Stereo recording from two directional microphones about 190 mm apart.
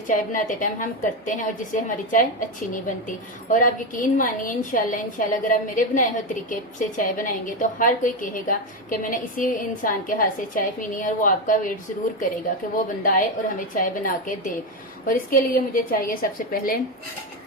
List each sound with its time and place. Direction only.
0.1 s a woman's voice: 45° left (ahead or behind)
12.7 s a woman's voice: 45° left (ahead or behind)